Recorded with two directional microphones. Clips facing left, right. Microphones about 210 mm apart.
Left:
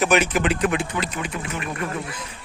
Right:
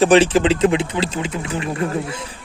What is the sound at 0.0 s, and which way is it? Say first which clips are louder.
Speech: right 7 dB; 30° right (ahead or behind).